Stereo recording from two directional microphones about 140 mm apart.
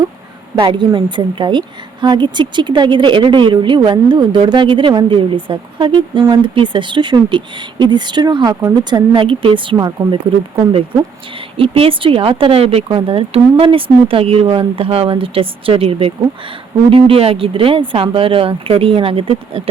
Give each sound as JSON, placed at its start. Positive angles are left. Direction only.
{"t": 0.5, "sound": "speech", "side_deg": -40}
{"t": 9.7, "sound": "speech", "side_deg": -25}
{"t": 11.3, "sound": "speech", "side_deg": -40}